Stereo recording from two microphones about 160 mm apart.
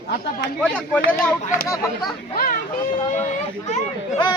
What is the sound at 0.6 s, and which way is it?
Speech, 5° left (ahead or behind).